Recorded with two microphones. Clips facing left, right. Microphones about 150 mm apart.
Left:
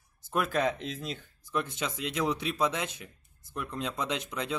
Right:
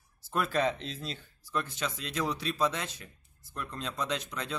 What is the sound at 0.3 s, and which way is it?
Speech, 10° left (ahead or behind).